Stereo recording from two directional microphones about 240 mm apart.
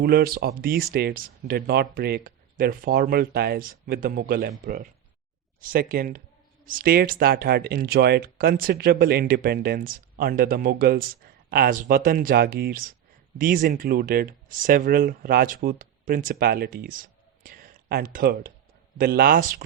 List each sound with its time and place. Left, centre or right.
0.0 s speech: right